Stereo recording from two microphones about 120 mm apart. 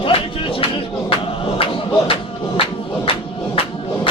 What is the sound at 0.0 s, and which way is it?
Music, 45° left (ahead or behind).